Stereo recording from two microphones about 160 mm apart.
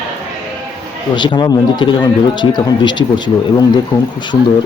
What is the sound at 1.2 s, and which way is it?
Speech, 30° left (ahead or behind).